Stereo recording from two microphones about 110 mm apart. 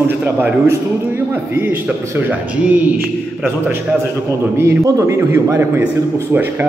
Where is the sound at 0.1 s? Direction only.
15° right (ahead or behind).